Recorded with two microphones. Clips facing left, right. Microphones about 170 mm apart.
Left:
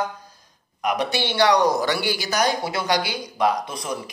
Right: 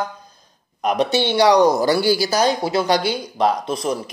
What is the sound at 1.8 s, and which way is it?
Speech, 35° right (ahead or behind).